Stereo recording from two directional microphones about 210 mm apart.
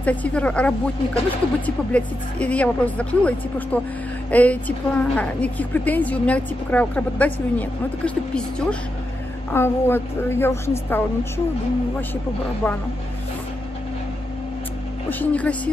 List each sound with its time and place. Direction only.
0.0 s a woman's voice: 5° left (ahead or behind)
1.9 s a woman's voice: 5° left (ahead or behind)
12.6 s a woman's voice: 10° left (ahead or behind)
15.0 s a woman's voice: 5° left (ahead or behind)